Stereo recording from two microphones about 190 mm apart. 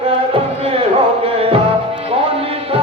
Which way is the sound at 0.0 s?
30° right (ahead or behind).